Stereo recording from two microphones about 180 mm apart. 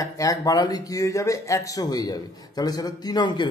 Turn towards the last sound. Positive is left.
turn(degrees=25)  # may be behind; listen again after turning